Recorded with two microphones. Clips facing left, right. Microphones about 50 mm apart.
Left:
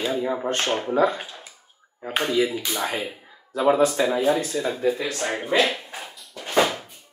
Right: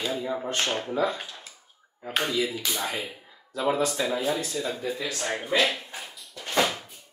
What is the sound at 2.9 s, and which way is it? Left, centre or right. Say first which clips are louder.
Speech: left 4 dB; centre.